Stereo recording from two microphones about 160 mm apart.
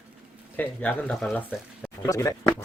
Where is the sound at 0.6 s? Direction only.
10° left (ahead or behind).